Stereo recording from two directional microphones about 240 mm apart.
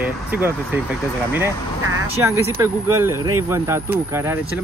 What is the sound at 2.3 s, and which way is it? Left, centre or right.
Speech, centre.